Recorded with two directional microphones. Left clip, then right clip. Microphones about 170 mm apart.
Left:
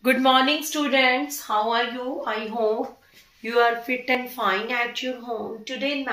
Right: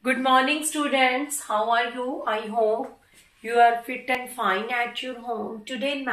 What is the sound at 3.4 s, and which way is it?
Speech, 25° left (ahead or behind).